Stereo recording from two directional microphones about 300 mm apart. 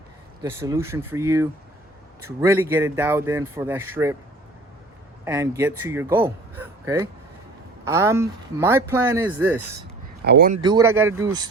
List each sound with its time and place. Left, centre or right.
0.4 s speech: centre
5.2 s a man's voice: centre
10.2 s speech: right
10.6 s speech: centre